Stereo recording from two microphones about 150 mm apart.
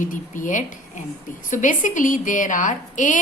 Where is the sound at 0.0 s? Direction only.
60° left (ahead or behind).